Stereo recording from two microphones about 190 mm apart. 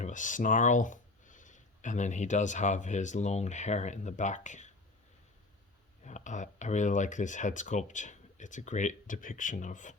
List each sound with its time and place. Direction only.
0.0 s speech: 40° left (ahead or behind)
6.1 s speech: 40° left (ahead or behind)